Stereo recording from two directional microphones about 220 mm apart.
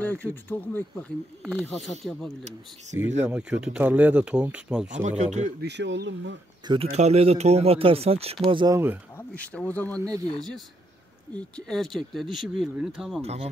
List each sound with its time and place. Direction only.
0.0 s speech: 10° left (ahead or behind)
5.0 s speech: 30° right (ahead or behind)
5.6 s speech: 50° right (ahead or behind)
6.7 s speech: 30° right (ahead or behind); by 9.0 s 10° right (ahead or behind)
9.1 s speech: 5° left (ahead or behind)
9.9 s speech: 15° right (ahead or behind)
11.3 s speech: 5° left (ahead or behind)
13.2 s speech: 30° right (ahead or behind)